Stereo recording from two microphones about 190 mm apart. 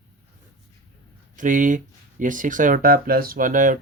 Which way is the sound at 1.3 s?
45° right (ahead or behind).